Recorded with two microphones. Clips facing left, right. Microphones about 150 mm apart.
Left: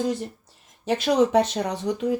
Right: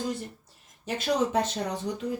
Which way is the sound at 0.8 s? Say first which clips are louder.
Left 7 dB; 85° left.